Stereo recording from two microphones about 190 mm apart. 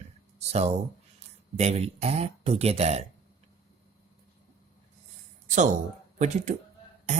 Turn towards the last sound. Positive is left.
turn(degrees=-35)  # may be behind; listen again after turning